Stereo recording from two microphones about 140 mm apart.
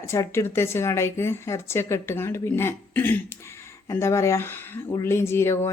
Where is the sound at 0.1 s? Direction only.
20° left (ahead or behind).